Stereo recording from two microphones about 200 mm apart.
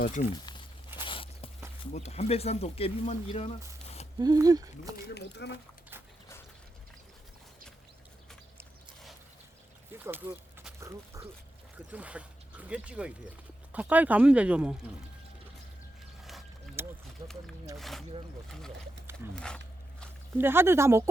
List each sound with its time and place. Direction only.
0.0 s speech: 40° left (ahead or behind)
1.0 s walk: 25° left (ahead or behind)
1.9 s speech: 35° left (ahead or behind)
4.2 s speech: 20° right (ahead or behind)
4.9 s speech: 50° left (ahead or behind)
10.0 s speech: 10° right (ahead or behind)
16.8 s a sound: 10° right (ahead or behind)
17.2 s speech: 35° right (ahead or behind)
17.7 s speech: centre (ahead or behind)
20.4 s speech: 10° right (ahead or behind)